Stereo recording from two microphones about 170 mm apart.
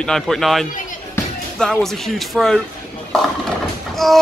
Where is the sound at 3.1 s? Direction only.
Centre (ahead or behind).